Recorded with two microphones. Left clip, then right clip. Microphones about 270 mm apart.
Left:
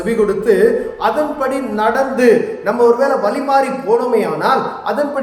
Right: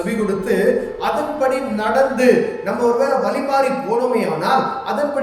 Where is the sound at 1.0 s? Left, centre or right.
Centre.